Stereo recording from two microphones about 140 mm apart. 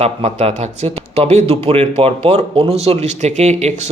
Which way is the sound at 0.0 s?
50° right (ahead or behind).